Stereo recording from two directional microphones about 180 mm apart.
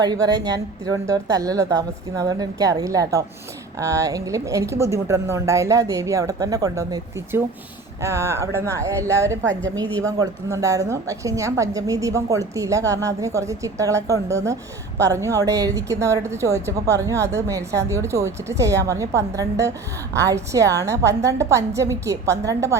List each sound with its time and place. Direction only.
0.0 s a woman's voice: 20° right (ahead or behind)